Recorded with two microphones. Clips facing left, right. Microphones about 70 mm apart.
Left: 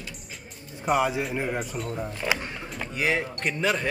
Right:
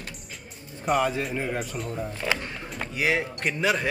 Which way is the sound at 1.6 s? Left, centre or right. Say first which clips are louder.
Even; centre.